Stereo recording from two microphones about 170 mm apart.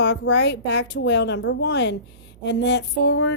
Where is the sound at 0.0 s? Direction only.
90° left.